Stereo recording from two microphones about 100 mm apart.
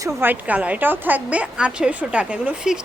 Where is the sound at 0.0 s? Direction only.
20° right (ahead or behind).